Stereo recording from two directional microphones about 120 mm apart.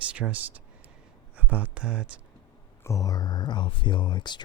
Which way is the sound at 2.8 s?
30° left (ahead or behind).